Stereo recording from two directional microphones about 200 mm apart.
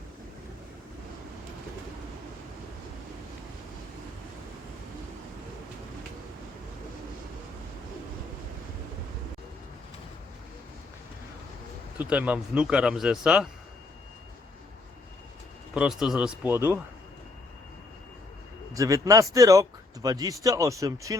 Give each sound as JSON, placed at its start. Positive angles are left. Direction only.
{"t": 11.9, "sound": "speech", "side_deg": -10}
{"t": 15.7, "sound": "speech", "side_deg": -5}
{"t": 18.7, "sound": "speech", "side_deg": -15}